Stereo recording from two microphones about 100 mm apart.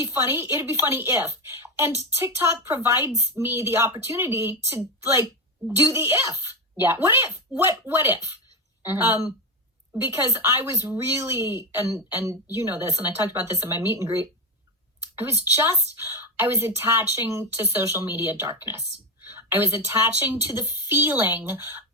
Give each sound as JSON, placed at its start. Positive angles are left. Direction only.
{"t": 0.0, "sound": "a woman's voice", "side_deg": -25}